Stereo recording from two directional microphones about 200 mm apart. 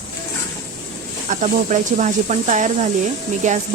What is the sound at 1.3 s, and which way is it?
Speech, 40° right (ahead or behind).